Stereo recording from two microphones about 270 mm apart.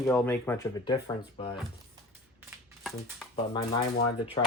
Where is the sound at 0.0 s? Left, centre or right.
Centre.